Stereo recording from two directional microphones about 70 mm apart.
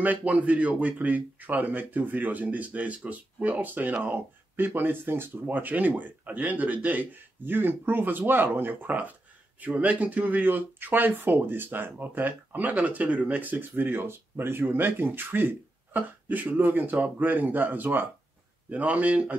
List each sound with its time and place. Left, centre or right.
0.0 s speech: right